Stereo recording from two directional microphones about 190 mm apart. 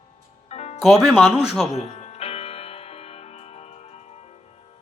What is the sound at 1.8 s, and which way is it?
Music, 35° left (ahead or behind).